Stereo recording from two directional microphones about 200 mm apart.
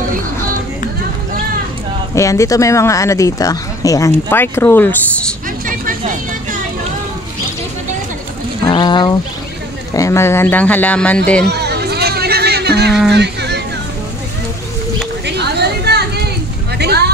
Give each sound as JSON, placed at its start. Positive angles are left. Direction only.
{"t": 2.1, "sound": "speech", "side_deg": 15}
{"t": 5.7, "sound": "a sound", "side_deg": -45}
{"t": 8.6, "sound": "speech", "side_deg": 25}
{"t": 11.4, "sound": "chatter", "side_deg": -55}
{"t": 13.1, "sound": "hubbub", "side_deg": -55}
{"t": 15.2, "sound": "chatter", "side_deg": -55}
{"t": 16.7, "sound": "vehicle", "side_deg": -55}